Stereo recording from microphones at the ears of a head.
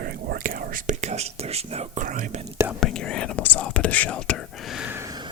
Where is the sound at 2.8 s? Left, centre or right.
Left.